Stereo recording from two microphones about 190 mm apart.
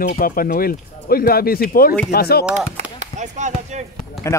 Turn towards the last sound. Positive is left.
turn(degrees=15)  # may be behind; listen again after turning